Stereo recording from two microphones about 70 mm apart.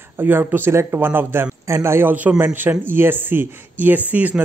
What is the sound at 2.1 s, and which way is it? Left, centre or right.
A man's voice, right.